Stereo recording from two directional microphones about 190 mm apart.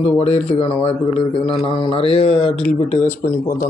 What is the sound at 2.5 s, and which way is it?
Mantra, 5° left (ahead or behind).